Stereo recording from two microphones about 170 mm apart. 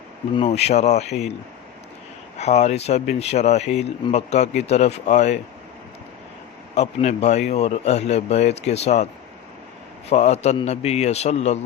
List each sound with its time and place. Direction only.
0.3 s speech: 40° left (ahead or behind)
2.4 s speech: 40° left (ahead or behind)
6.7 s speech: 40° left (ahead or behind)
10.1 s speech: 40° left (ahead or behind)